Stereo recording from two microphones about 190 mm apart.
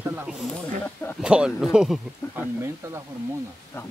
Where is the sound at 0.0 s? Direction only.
5° right (ahead or behind).